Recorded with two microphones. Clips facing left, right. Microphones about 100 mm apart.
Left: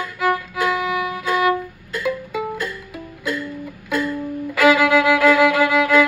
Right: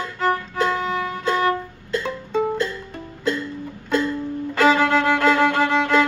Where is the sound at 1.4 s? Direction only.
25° right (ahead or behind).